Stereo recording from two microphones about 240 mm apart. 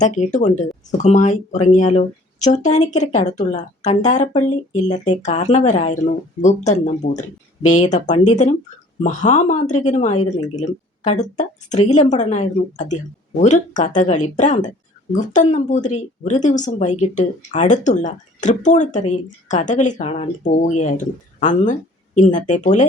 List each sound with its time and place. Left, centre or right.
0.0 s speech: left